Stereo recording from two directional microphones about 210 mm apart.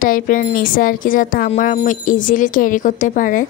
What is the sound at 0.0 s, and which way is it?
Speech, 40° left (ahead or behind).